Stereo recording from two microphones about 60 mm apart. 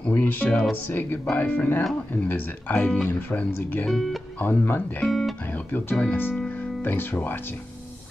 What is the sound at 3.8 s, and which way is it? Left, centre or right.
Speech, centre.